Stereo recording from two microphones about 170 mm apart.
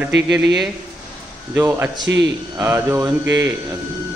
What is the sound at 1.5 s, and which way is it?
Speech, 10° right (ahead or behind).